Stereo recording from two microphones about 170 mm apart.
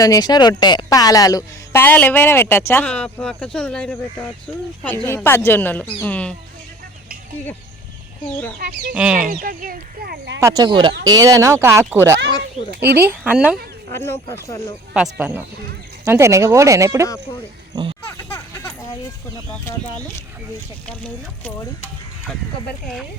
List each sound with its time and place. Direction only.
0.0 s a woman's voice: 25° left (ahead or behind)
8.9 s speech: 5° right (ahead or behind)
9.3 s speech: 55° right (ahead or behind)
10.4 s speech: 25° right (ahead or behind)
12.7 s speech: 70° right (ahead or behind)
13.0 s speech: 10° right (ahead or behind)
13.9 s a woman's voice: 15° left (ahead or behind)
14.9 s speech: 5° right (ahead or behind); by 17.9 s 25° right (ahead or behind)
18.2 s a sound: 15° left (ahead or behind)
20.8 s a woman's voice: 5° left (ahead or behind)